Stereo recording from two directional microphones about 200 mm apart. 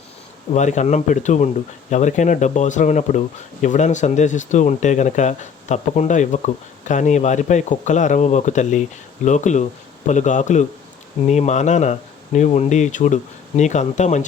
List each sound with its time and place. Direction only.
0.5 s speech: 35° left (ahead or behind)